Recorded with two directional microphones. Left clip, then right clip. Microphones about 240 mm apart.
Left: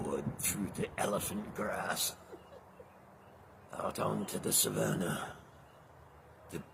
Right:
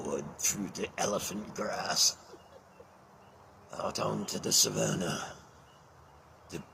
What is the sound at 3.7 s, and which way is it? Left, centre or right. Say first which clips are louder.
Speech: right 2 dB; centre.